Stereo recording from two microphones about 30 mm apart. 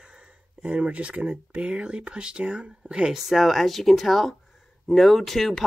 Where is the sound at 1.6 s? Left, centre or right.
Right.